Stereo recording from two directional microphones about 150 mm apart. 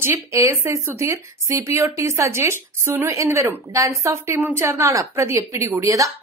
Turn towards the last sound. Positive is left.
turn(degrees=-20)  # may be behind; listen again after turning